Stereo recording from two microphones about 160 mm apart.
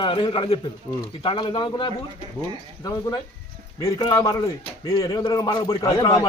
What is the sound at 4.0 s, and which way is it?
A man's voice, 30° left (ahead or behind).